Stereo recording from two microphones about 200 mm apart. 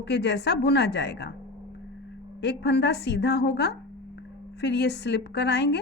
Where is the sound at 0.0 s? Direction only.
60° left (ahead or behind).